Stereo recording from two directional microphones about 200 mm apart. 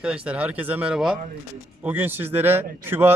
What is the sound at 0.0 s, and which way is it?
Speech, 5° right (ahead or behind).